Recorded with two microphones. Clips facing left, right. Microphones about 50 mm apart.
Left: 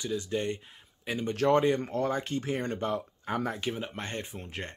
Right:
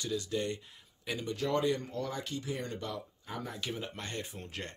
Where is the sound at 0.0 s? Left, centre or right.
Left.